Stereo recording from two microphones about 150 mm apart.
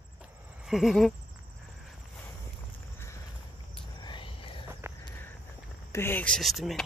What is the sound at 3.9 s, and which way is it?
Whispering, 35° left (ahead or behind).